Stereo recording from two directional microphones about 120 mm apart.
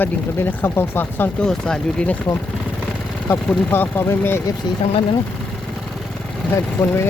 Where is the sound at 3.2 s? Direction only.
20° left (ahead or behind).